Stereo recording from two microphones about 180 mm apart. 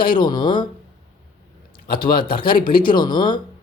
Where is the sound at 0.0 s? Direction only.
25° left (ahead or behind).